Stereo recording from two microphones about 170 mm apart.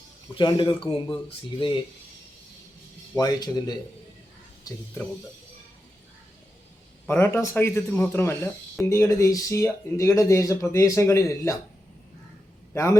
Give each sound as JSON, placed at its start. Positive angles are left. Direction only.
{"t": 0.3, "sound": "speech", "side_deg": 30}
{"t": 3.2, "sound": "speech", "side_deg": 25}
{"t": 7.1, "sound": "speech", "side_deg": 15}
{"t": 12.7, "sound": "a man's voice", "side_deg": 15}